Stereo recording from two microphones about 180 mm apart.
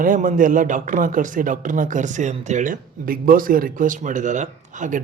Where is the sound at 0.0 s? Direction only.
45° right (ahead or behind).